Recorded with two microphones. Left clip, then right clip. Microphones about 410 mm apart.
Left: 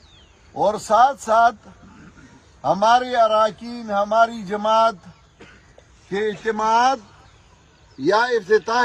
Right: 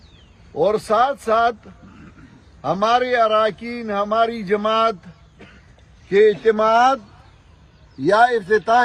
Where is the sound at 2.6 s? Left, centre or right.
Centre.